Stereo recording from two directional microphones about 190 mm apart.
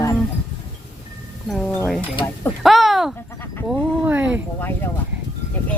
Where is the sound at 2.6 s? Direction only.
Centre (ahead or behind).